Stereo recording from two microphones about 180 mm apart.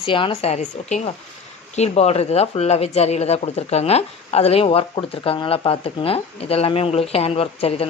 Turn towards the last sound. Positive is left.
turn(degrees=35)  # may be behind; listen again after turning